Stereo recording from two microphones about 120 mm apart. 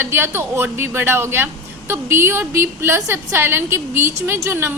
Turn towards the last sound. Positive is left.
turn(degrees=-20)  # may be behind; listen again after turning